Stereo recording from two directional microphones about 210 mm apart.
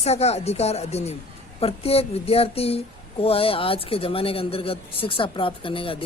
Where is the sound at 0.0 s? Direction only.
30° left (ahead or behind).